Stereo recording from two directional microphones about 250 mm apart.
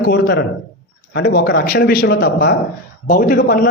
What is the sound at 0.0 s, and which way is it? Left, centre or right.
A man's voice, left.